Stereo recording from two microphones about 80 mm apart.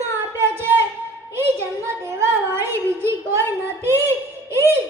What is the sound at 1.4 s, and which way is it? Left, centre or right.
Music, right.